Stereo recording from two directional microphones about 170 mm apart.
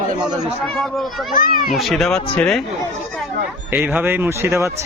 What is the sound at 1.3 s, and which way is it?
Speech, 55° left (ahead or behind).